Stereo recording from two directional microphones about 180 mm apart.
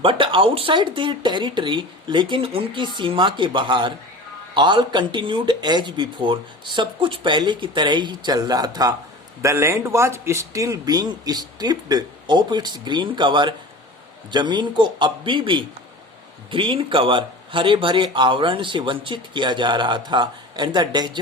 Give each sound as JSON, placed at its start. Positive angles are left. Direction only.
{"t": 0.0, "sound": "speech", "side_deg": -30}